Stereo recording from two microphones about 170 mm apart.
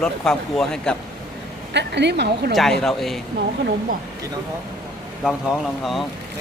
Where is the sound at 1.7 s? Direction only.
85° right.